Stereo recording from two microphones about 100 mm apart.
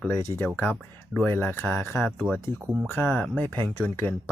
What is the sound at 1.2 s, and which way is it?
Speech, 20° left (ahead or behind).